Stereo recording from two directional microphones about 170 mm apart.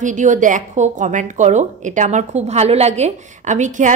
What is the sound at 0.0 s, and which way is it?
A woman's voice, 45° right (ahead or behind).